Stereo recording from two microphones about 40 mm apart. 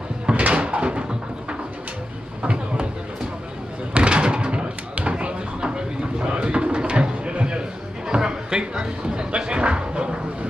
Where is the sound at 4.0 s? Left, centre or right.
Right.